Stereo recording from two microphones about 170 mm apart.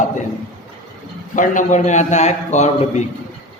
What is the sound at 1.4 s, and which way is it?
Speech, 50° left (ahead or behind).